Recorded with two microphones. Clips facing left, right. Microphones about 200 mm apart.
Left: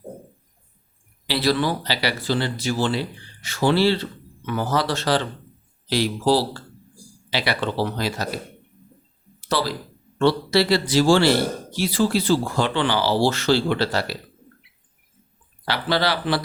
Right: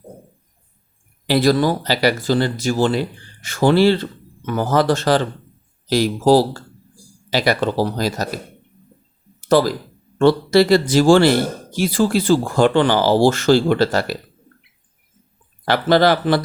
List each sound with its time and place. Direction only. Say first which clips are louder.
1.3 s speech: right 6 dB; 45° right (ahead or behind)
9.4 s speech: right 9 dB; 45° right (ahead or behind)
15.6 s speech: right 8 dB; 50° right (ahead or behind)